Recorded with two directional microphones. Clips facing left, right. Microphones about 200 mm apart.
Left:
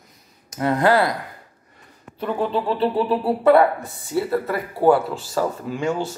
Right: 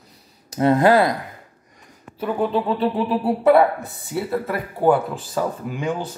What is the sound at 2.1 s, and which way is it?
Speech, 5° right (ahead or behind).